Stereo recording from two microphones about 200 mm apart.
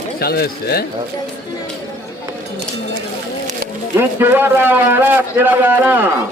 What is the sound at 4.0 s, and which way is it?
A man's voice, 10° right (ahead or behind).